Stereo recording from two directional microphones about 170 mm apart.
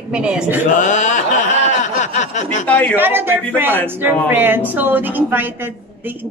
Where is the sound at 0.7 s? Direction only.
45° left (ahead or behind).